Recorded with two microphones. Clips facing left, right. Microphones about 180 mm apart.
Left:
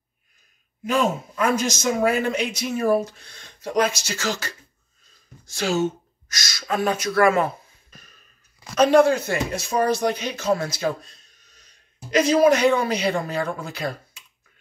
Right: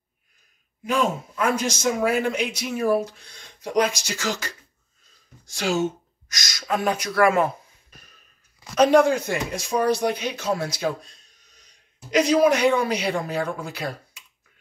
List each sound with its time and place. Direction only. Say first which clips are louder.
1.6 s speech: left 1 dB; 10° right (ahead or behind)
8.7 s speech: left 1 dB; 15° right (ahead or behind)